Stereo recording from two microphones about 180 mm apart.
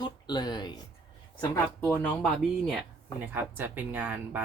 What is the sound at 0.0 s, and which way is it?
Speech, 25° left (ahead or behind).